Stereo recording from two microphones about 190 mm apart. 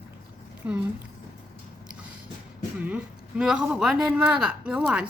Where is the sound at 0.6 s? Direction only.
10° right (ahead or behind).